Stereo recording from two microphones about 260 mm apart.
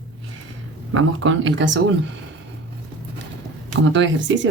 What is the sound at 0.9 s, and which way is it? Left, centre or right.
Speech, right.